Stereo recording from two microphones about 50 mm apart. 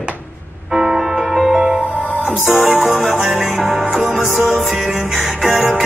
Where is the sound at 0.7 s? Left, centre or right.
Centre.